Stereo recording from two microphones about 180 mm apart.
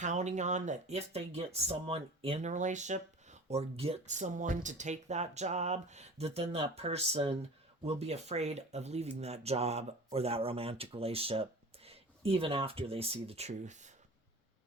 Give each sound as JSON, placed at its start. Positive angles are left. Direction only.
{"t": 0.0, "sound": "speech", "side_deg": -40}